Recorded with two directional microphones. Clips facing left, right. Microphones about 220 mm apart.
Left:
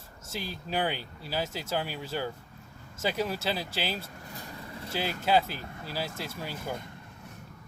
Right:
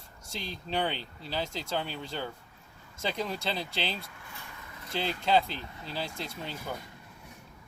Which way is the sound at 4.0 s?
40° left (ahead or behind).